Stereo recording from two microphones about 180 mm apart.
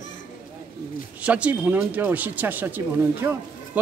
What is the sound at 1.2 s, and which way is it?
Speech, 5° right (ahead or behind).